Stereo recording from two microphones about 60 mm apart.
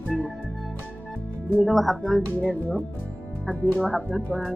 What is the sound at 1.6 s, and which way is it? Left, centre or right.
Speech, centre.